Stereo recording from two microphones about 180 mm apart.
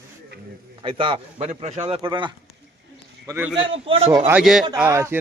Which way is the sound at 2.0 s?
25° right (ahead or behind).